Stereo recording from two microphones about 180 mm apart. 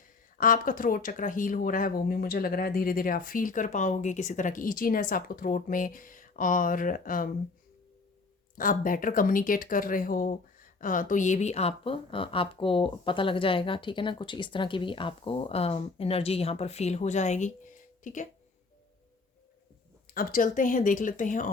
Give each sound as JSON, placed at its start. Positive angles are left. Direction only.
{"t": 0.0, "sound": "speech", "side_deg": 50}
{"t": 8.5, "sound": "speech", "side_deg": 50}
{"t": 20.1, "sound": "speech", "side_deg": 50}